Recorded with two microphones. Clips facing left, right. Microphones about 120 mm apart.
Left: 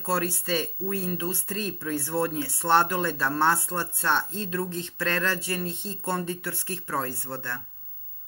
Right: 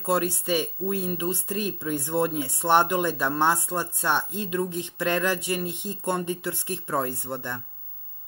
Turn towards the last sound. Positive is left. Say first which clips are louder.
# right 2 dB
turn(degrees=-15)  # may be behind; listen again after turning